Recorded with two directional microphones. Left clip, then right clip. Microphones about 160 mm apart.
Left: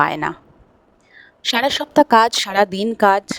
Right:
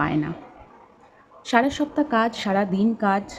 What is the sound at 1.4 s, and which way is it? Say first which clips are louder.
A woman's voice: left 3 dB; 70° left (ahead or behind).